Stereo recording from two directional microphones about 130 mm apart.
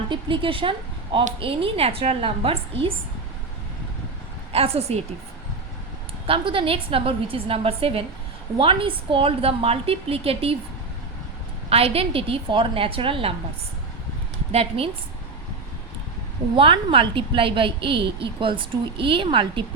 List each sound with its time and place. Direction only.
0.1 s a woman's voice: 40° right (ahead or behind)
4.5 s a woman's voice: 50° right (ahead or behind)
6.2 s a woman's voice: 45° right (ahead or behind)
11.7 s a woman's voice: 50° right (ahead or behind)
14.5 s a woman's voice: 50° right (ahead or behind)
16.6 s a woman's voice: 45° right (ahead or behind)